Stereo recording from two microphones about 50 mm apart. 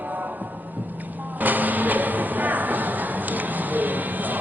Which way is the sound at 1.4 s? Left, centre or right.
Right.